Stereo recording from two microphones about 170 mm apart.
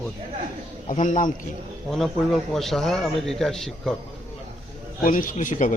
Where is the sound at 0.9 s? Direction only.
45° left (ahead or behind).